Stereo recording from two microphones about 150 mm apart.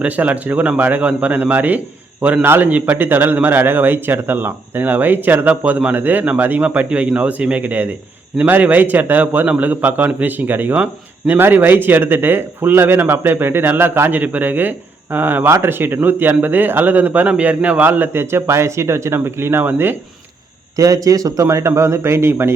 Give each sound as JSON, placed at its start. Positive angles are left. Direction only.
{"t": 0.0, "sound": "a man's voice", "side_deg": -10}